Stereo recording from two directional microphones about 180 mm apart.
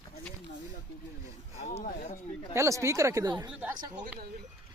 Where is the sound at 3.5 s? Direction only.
10° right (ahead or behind).